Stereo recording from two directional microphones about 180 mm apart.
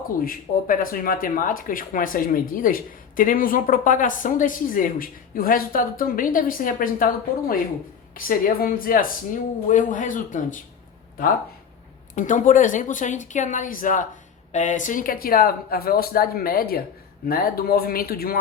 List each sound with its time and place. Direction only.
0.2 s speech: 50° left (ahead or behind)
12.1 s speech: 45° left (ahead or behind)